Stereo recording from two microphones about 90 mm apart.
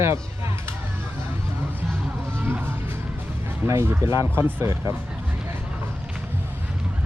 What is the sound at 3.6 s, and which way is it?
Speech, 30° right (ahead or behind).